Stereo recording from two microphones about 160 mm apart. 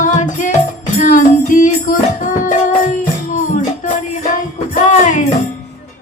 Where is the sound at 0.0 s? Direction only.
50° left (ahead or behind).